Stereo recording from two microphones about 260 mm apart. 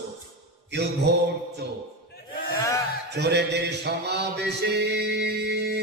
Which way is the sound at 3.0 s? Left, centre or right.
Right.